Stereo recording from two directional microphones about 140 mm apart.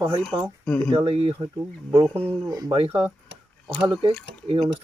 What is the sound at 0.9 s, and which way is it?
Speech, 40° right (ahead or behind).